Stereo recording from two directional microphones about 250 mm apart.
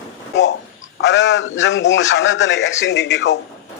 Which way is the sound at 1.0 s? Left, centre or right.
Left.